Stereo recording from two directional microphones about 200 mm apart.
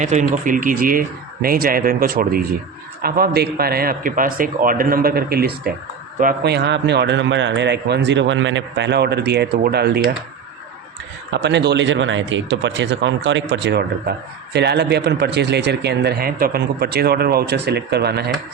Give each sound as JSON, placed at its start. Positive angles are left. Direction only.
{"t": 0.0, "sound": "a man's voice", "side_deg": -35}
{"t": 11.3, "sound": "speech", "side_deg": -60}